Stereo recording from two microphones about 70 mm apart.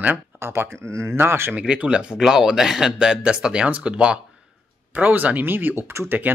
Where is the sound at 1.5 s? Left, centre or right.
Centre.